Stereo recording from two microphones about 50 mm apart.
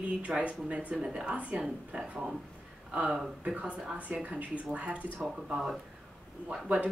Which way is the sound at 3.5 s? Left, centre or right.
Right.